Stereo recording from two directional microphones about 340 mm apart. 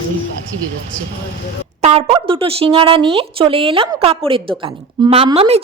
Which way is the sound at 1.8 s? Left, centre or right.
Centre.